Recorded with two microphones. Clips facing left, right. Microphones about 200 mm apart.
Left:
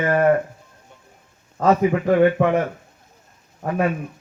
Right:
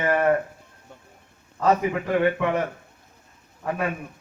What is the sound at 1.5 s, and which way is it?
Speech, 40° left (ahead or behind).